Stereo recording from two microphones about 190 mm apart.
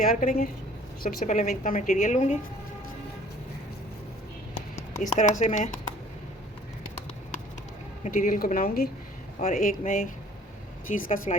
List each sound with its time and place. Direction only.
0.0 s a woman's voice: 45° left (ahead or behind)
4.9 s a woman's voice: 40° left (ahead or behind)
8.0 s speech: 45° left (ahead or behind)